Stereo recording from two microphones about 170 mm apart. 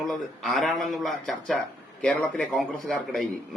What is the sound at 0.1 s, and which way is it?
Speech, centre (ahead or behind).